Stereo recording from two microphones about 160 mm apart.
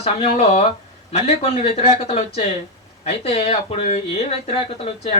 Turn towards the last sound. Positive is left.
turn(degrees=40)  # may be behind; listen again after turning